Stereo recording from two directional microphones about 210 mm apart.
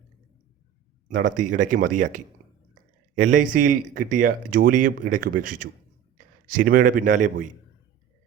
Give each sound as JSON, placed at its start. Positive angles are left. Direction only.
{"t": 1.0, "sound": "speech", "side_deg": -40}